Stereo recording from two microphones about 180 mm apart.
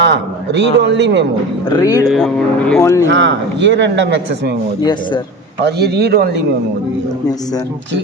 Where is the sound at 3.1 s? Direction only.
90° right.